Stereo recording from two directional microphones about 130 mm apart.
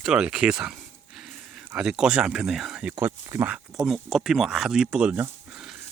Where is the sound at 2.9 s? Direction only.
25° right (ahead or behind).